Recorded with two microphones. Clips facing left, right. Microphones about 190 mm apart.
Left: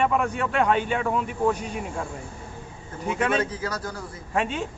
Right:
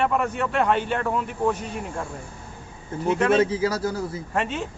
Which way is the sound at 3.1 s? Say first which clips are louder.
Right 5 dB; centre (ahead or behind).